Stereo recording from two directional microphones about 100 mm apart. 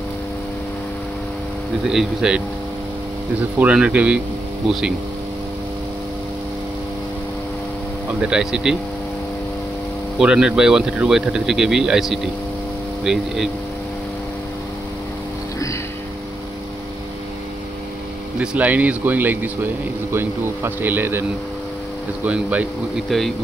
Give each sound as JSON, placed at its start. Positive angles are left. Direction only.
{"t": 1.9, "sound": "speech", "side_deg": -5}
{"t": 3.5, "sound": "speech", "side_deg": -15}
{"t": 8.2, "sound": "speech", "side_deg": -10}
{"t": 10.1, "sound": "speech", "side_deg": -10}
{"t": 18.4, "sound": "speech", "side_deg": -10}
{"t": 23.0, "sound": "speech", "side_deg": 0}